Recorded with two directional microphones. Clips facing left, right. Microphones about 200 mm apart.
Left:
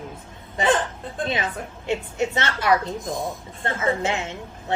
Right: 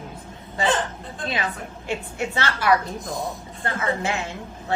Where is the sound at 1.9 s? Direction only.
20° left (ahead or behind).